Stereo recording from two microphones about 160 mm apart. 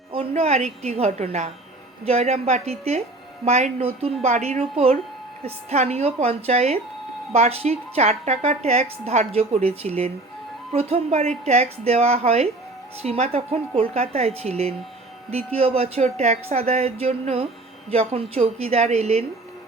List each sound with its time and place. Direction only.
0.1 s a woman's voice: 35° right (ahead or behind)